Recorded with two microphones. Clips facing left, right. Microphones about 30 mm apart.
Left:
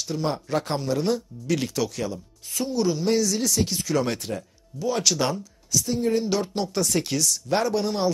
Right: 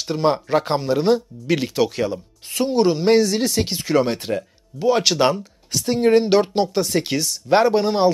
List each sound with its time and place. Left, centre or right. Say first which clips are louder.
0.0 s speech: right 8 dB; right